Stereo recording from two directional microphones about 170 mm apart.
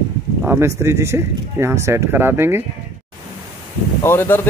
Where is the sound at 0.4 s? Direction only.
15° right (ahead or behind).